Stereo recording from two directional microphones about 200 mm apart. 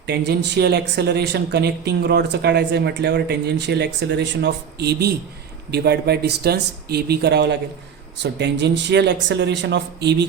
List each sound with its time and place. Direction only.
0.1 s speech: 60° right (ahead or behind)